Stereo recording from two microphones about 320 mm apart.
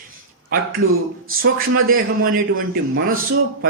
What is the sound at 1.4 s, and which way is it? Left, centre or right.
A man's voice, right.